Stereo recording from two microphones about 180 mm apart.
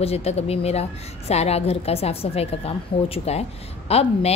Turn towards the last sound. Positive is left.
turn(degrees=35)  # may be behind; listen again after turning